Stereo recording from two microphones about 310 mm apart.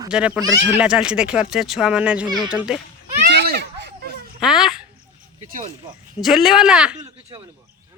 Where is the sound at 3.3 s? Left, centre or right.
Right.